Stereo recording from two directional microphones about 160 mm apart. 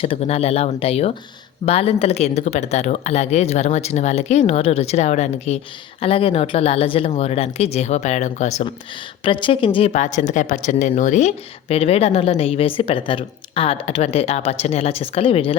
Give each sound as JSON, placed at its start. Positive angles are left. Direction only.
{"t": 0.0, "sound": "speech", "side_deg": 35}
{"t": 9.2, "sound": "speech", "side_deg": 30}
{"t": 9.9, "sound": "speech", "side_deg": 50}